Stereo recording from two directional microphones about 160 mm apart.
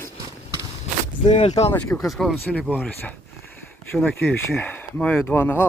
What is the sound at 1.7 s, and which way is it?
Speech, 5° left (ahead or behind).